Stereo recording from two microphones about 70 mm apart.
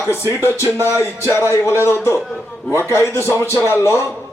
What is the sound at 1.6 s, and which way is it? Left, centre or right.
Speech, left.